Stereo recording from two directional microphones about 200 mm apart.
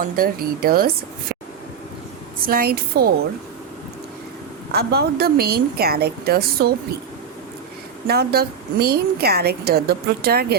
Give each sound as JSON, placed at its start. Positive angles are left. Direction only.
{"t": 0.2, "sound": "a woman's voice", "side_deg": -50}
{"t": 2.4, "sound": "a woman's voice", "side_deg": -45}
{"t": 4.7, "sound": "a woman's voice", "side_deg": -50}
{"t": 8.0, "sound": "a woman's voice", "side_deg": -50}